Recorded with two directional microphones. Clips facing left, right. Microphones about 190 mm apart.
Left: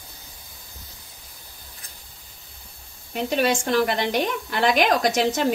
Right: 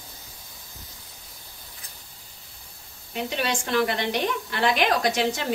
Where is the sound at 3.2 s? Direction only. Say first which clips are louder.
Left 7 dB; 45° left (ahead or behind).